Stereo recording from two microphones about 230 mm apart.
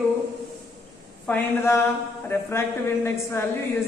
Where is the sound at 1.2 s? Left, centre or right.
Centre.